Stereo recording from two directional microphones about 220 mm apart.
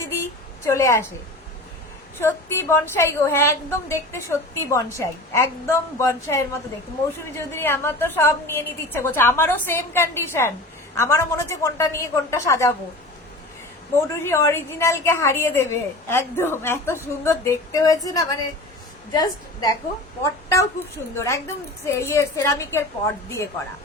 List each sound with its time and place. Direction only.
0.1 s a sound: 15° left (ahead or behind)
2.2 s a woman's voice: 10° left (ahead or behind)
13.9 s a woman's voice: 15° left (ahead or behind)